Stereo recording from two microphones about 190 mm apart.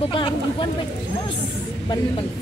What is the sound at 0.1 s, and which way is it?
Speech, 25° left (ahead or behind).